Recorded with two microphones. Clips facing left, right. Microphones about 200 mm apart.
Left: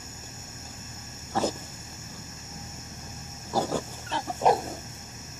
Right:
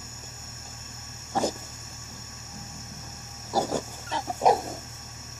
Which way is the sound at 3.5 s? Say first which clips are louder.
Right 1 dB; 10° right (ahead or behind).